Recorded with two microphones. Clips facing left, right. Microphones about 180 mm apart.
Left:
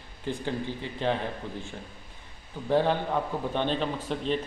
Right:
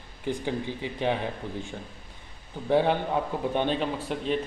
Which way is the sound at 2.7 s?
15° right (ahead or behind).